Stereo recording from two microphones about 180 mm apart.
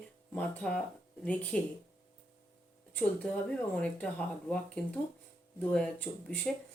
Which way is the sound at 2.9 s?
5° left (ahead or behind).